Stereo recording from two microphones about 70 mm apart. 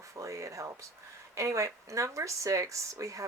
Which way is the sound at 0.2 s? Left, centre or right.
Right.